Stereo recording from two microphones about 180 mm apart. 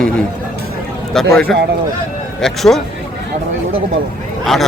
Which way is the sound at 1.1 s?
Centre (ahead or behind).